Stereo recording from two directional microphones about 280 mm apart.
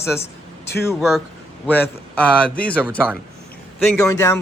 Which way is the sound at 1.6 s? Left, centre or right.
Centre.